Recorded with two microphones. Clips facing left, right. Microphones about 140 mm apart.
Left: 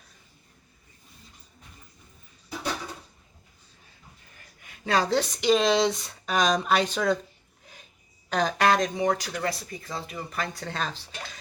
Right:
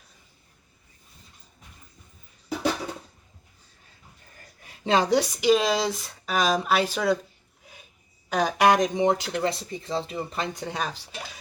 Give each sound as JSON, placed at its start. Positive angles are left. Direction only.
{"t": 4.6, "sound": "speech", "side_deg": -30}
{"t": 7.6, "sound": "a sound", "side_deg": -5}
{"t": 8.3, "sound": "speech", "side_deg": -10}